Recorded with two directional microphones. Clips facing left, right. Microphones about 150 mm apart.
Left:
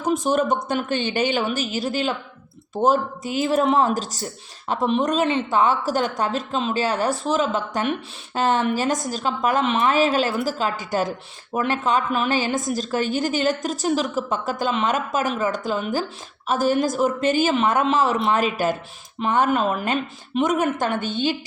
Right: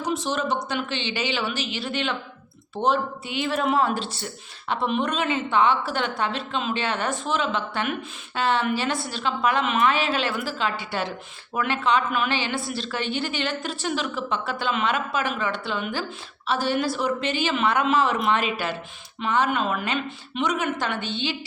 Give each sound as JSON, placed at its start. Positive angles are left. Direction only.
{"t": 0.0, "sound": "a woman's voice", "side_deg": 50}